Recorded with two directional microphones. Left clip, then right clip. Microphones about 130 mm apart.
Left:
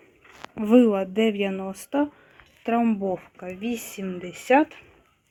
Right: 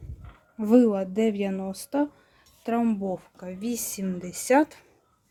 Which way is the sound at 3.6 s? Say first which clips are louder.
Even; 35° right (ahead or behind).